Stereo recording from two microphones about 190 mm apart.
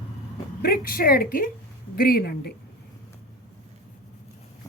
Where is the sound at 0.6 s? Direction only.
50° left (ahead or behind).